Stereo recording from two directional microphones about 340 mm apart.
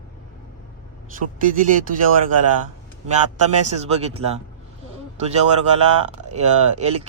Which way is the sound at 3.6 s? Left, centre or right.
Centre.